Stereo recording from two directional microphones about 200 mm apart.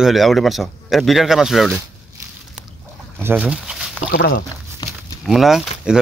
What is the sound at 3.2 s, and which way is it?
Speech, 10° right (ahead or behind).